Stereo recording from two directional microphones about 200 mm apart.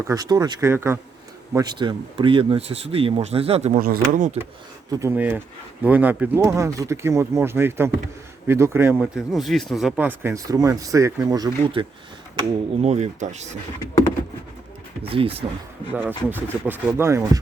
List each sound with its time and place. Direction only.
0.0 s speech: 15° right (ahead or behind); by 4.4 s 40° right (ahead or behind)
4.9 s speech: 15° right (ahead or behind)
9.0 s speech: centre (ahead or behind); by 11.9 s 20° right (ahead or behind)
12.8 s speech: 35° right (ahead or behind)
15.0 s speech: 25° right (ahead or behind)
15.9 s speech: 10° right (ahead or behind)